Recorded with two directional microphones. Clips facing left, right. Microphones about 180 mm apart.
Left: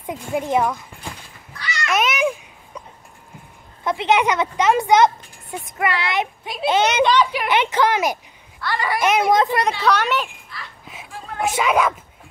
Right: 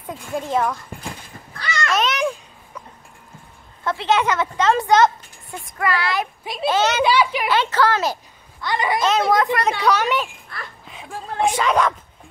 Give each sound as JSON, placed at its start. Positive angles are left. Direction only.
{"t": 0.0, "sound": "a woman's voice", "side_deg": 15}
{"t": 1.5, "sound": "cat", "side_deg": -50}
{"t": 1.9, "sound": "babbling", "side_deg": 10}
{"t": 3.8, "sound": "a woman's voice", "side_deg": 20}
{"t": 7.1, "sound": "a woman's voice", "side_deg": -5}
{"t": 7.4, "sound": "a woman's voice", "side_deg": 20}
{"t": 8.5, "sound": "a child's voice", "side_deg": -20}
{"t": 9.0, "sound": "speech", "side_deg": 20}
{"t": 9.8, "sound": "a woman's voice", "side_deg": -10}
{"t": 10.5, "sound": "a sound", "side_deg": -55}
{"t": 11.4, "sound": "a woman's voice", "side_deg": 5}